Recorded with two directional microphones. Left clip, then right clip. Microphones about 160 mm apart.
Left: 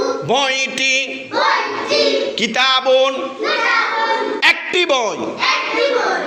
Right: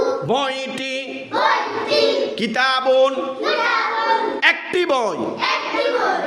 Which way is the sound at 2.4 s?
25° right (ahead or behind).